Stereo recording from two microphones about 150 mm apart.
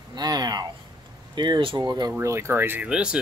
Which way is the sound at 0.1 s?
25° right (ahead or behind).